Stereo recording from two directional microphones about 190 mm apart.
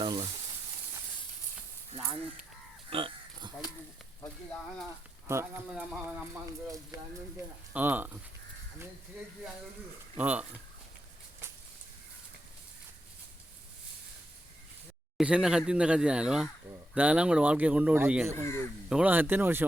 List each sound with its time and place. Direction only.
0.0 s a sound: 25° right (ahead or behind)
2.9 s pig: 30° right (ahead or behind)
5.3 s speech: 15° right (ahead or behind)
6.9 s speech: 20° right (ahead or behind)
10.2 s speech: 10° right (ahead or behind)
15.2 s speech: 5° right (ahead or behind)
18.4 s speech: 15° left (ahead or behind)
18.9 s speech: 5° right (ahead or behind)